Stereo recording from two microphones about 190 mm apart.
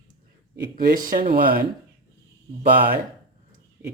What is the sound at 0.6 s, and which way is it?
Speech, 50° right (ahead or behind).